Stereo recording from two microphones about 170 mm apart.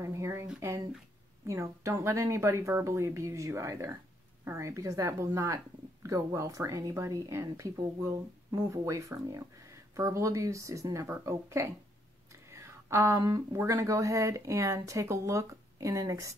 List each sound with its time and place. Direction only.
0.0 s speech: 15° right (ahead or behind)